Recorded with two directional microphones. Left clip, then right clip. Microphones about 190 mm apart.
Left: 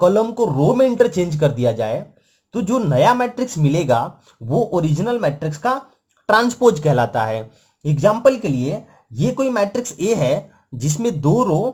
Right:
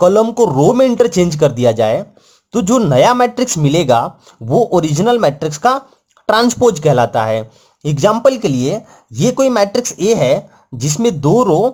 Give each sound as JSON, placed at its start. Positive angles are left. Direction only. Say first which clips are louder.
{"t": 0.0, "sound": "speech", "louder": "right 5 dB", "side_deg": -30}